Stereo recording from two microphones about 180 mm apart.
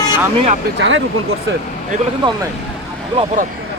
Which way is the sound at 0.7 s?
85° right.